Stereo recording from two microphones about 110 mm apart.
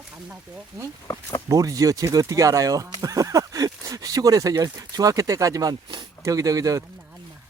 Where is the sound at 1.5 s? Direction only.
30° right (ahead or behind).